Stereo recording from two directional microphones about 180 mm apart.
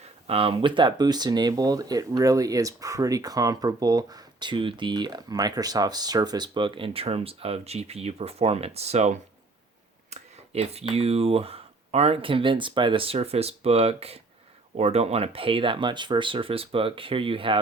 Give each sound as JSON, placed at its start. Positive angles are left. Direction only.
{"t": 0.3, "sound": "speech", "side_deg": -30}